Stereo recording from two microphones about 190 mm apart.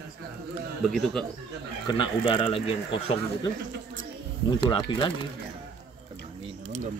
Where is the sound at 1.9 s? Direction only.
25° left (ahead or behind).